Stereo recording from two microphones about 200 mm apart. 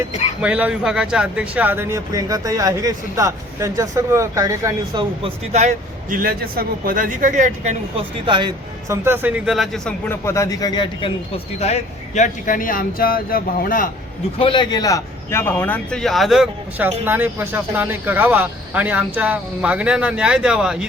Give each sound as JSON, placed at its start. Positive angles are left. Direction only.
{"t": 0.4, "sound": "speech", "side_deg": -5}
{"t": 8.2, "sound": "speech", "side_deg": -25}
{"t": 11.6, "sound": "speech", "side_deg": 35}
{"t": 14.3, "sound": "a man's voice", "side_deg": 25}